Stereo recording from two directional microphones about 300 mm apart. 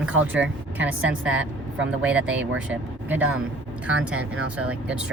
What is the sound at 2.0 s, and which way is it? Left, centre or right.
Speech, centre.